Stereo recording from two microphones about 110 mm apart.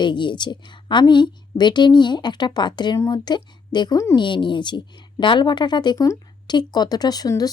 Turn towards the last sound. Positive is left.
turn(degrees=35)  # may be behind; listen again after turning